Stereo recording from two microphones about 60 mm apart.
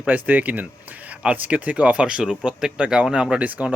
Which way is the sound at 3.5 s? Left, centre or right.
Right.